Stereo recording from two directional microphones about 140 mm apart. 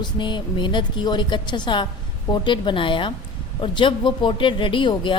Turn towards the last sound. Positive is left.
turn(degrees=35)  # may be behind; listen again after turning